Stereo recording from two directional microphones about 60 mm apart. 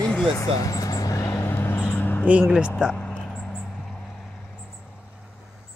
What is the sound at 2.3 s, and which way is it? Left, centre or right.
Speech, centre.